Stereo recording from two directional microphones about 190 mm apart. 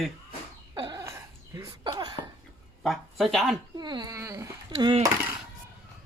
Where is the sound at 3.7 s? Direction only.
20° right (ahead or behind).